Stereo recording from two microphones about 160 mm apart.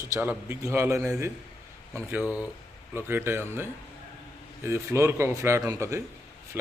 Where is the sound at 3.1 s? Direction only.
15° right (ahead or behind).